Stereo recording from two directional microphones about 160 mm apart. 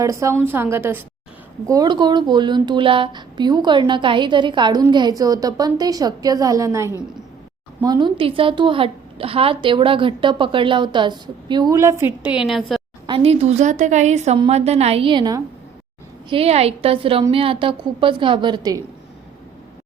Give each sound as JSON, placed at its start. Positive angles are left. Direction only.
{"t": 0.0, "sound": "a woman's voice", "side_deg": -20}
{"t": 13.1, "sound": "a woman's voice", "side_deg": -35}
{"t": 16.3, "sound": "a woman's voice", "side_deg": -40}